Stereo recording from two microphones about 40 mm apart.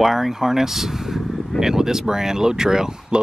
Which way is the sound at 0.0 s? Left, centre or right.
Centre.